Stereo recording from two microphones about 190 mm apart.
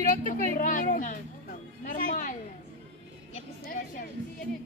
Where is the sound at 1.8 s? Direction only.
45° left (ahead or behind).